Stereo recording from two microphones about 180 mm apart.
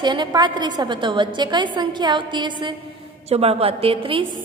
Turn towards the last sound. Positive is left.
turn(degrees=-30)  # may be behind; listen again after turning